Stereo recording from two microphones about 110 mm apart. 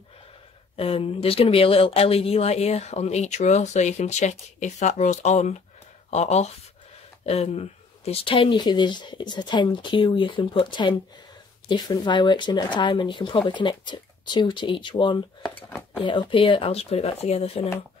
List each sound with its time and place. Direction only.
0.7 s speech: 60° left (ahead or behind); by 6.5 s 90° left
7.2 s speech: 70° left (ahead or behind)